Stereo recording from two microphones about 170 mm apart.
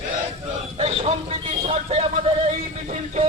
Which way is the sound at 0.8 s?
40° right (ahead or behind).